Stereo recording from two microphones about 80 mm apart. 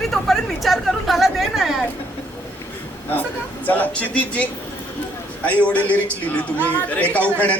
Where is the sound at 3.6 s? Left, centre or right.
Left.